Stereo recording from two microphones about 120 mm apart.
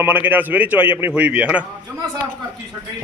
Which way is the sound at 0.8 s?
45° left (ahead or behind).